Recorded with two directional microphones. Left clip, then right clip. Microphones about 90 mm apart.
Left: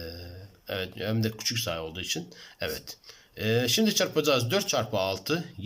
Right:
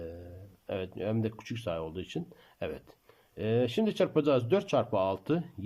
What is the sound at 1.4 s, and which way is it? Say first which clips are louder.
Speech: left 12 dB; 60° right (ahead or behind).